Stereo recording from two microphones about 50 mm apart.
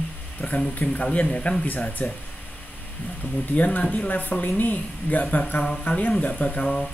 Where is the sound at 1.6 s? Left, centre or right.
Left.